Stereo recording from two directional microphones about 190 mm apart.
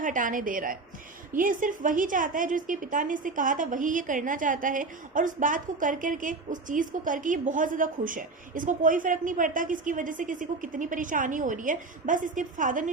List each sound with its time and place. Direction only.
0.0 s a woman's voice: 45° right (ahead or behind)